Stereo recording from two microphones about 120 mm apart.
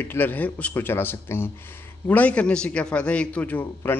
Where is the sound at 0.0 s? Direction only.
15° left (ahead or behind).